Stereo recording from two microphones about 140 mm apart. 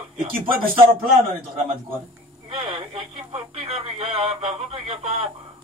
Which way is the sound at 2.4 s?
40° right (ahead or behind).